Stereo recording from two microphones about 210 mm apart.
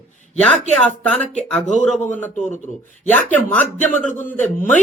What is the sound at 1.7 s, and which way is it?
Speech, 35° left (ahead or behind).